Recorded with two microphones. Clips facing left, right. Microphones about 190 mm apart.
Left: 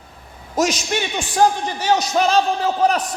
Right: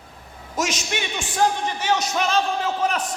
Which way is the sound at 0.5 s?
35° left (ahead or behind).